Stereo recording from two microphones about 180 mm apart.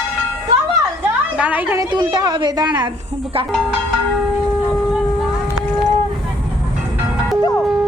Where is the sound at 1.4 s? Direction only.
10° right (ahead or behind).